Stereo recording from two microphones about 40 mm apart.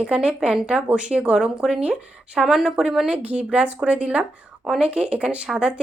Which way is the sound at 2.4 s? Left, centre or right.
Centre.